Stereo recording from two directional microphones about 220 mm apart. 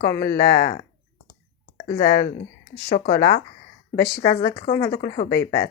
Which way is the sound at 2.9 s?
40° left (ahead or behind).